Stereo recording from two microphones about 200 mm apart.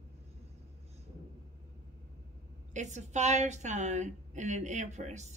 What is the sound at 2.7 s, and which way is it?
A woman's voice, 35° right (ahead or behind).